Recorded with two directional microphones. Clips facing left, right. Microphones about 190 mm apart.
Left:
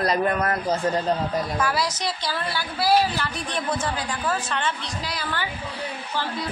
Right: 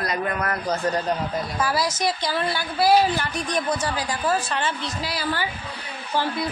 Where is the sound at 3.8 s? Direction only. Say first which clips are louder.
Right 2 dB; 35° right (ahead or behind).